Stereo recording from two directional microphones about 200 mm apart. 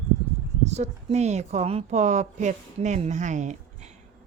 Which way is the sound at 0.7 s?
35° right (ahead or behind).